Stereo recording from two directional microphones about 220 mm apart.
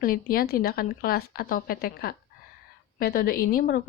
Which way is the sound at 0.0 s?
40° left (ahead or behind).